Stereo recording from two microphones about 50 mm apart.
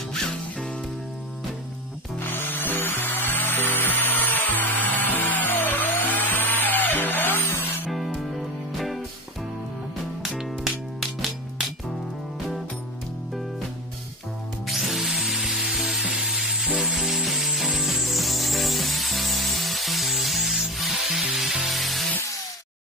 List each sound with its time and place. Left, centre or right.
0.1 s music: centre
2.1 s music: left
7.9 s music: centre
10.2 s music: centre
14.7 s tools: centre
15.5 s music: centre
16.2 s rub: centre
17.7 s music: centre